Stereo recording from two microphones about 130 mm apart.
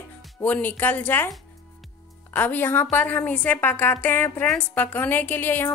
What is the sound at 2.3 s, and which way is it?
A woman's voice, 15° left (ahead or behind).